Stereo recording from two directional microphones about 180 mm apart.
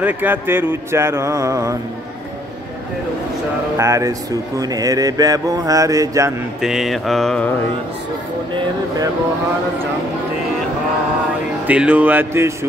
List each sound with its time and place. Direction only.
0.0 s mantra: 10° right (ahead or behind)
3.7 s mantra: 15° right (ahead or behind)
6.6 s mantra: centre (ahead or behind)
11.6 s mantra: 5° right (ahead or behind)